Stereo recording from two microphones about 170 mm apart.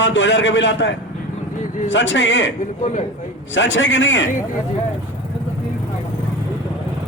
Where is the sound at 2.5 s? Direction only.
45° left (ahead or behind).